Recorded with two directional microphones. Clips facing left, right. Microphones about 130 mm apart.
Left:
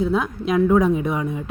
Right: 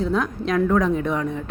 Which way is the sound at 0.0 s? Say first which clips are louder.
Left 1 dB; 5° left (ahead or behind).